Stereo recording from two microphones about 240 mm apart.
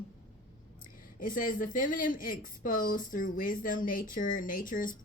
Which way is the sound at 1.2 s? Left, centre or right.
Left.